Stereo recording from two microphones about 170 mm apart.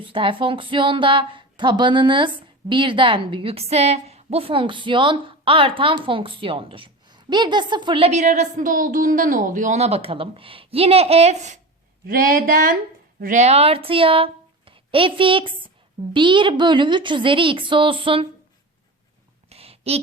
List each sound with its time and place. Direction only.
0.0 s speech: 30° right (ahead or behind)
12.0 s a woman's voice: 55° right (ahead or behind); by 18.3 s 30° right (ahead or behind)
19.5 s a sound: 35° right (ahead or behind)